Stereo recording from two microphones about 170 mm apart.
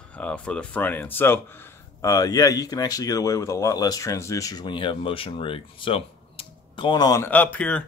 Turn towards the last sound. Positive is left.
turn(degrees=10)  # may be behind; listen again after turning